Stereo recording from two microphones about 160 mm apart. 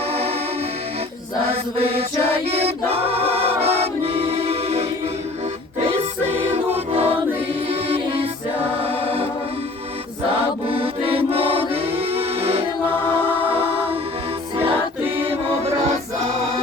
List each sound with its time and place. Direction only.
0.1 s music: 40° right (ahead or behind)
1.8 s music: 40° right (ahead or behind)
6.5 s music: 40° right (ahead or behind)
10.7 s music: 35° right (ahead or behind)
12.9 s music: 15° left (ahead or behind)
14.5 s music: 35° right (ahead or behind)